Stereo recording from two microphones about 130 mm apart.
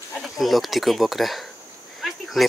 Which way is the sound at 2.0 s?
Centre (ahead or behind).